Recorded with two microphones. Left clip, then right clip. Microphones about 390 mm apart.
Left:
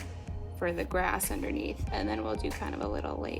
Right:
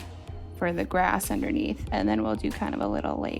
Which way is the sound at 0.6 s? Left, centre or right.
Right.